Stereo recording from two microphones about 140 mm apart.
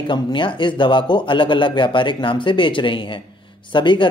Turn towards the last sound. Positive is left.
turn(degrees=35)  # may be behind; listen again after turning